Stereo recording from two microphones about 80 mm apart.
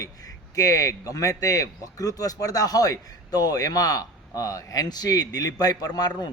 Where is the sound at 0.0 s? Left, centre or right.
Left.